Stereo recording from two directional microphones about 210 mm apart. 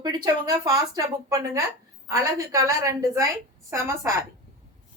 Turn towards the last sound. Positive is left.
turn(degrees=-15)  # may be behind; listen again after turning